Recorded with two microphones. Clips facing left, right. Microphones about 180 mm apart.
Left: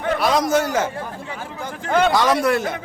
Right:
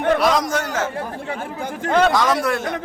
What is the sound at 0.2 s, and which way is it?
Speech, centre (ahead or behind).